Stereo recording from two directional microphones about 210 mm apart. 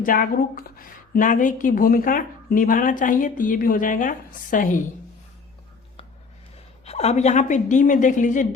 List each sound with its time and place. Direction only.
0.0 s speech: 40° left (ahead or behind)
6.8 s speech: 30° left (ahead or behind)